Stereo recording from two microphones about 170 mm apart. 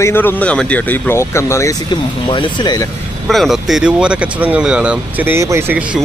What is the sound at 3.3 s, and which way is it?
Speech, centre (ahead or behind).